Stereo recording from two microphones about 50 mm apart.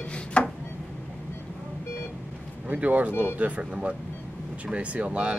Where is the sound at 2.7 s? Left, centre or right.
Right.